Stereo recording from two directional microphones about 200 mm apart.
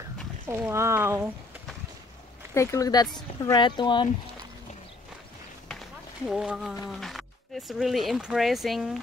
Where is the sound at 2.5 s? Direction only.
15° left (ahead or behind).